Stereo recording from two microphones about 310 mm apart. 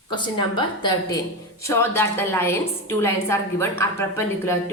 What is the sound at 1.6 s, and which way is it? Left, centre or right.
A woman's voice, centre.